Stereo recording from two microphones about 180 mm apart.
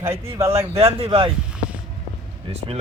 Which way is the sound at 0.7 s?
30° right (ahead or behind).